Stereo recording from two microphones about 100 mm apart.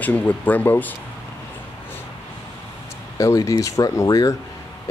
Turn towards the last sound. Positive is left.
turn(degrees=35)  # may be behind; listen again after turning